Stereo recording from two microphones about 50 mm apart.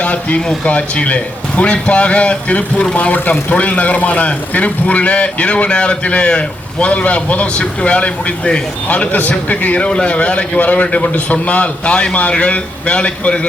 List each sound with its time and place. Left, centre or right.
0.0 s speech: left